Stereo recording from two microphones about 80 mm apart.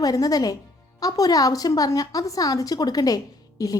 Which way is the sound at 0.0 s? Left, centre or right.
Left.